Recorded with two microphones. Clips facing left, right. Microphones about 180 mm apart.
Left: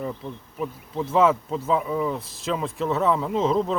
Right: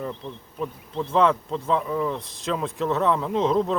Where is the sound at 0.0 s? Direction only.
10° left (ahead or behind).